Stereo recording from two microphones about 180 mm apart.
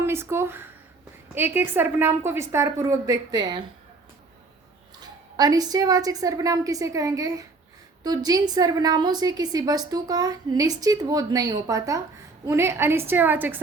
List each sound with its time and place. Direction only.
0.0 s a woman's voice: 15° right (ahead or behind)
4.9 s a woman's voice: 20° right (ahead or behind)